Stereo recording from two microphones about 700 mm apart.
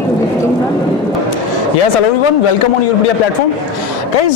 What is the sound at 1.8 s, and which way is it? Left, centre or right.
Speech, left.